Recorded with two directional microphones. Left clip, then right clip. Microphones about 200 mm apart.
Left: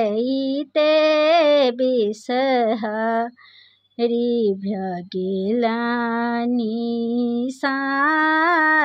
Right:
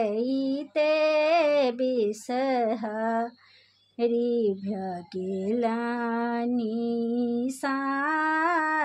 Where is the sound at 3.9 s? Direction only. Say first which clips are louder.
Left 5 dB; 35° left (ahead or behind).